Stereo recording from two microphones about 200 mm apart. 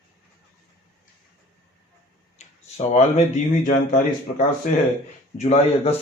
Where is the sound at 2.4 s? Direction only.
35° left (ahead or behind).